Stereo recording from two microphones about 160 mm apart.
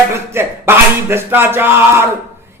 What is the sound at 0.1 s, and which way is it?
Speech, 15° right (ahead or behind).